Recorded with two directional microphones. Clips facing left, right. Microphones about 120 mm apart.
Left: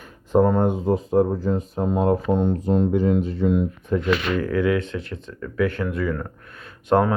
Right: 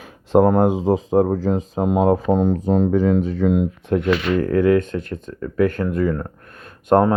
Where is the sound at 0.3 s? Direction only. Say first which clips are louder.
Right 4 dB; 70° right (ahead or behind); by 3.6 s 90° right.